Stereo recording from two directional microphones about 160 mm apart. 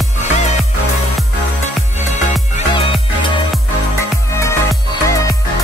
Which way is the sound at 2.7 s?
30° left (ahead or behind).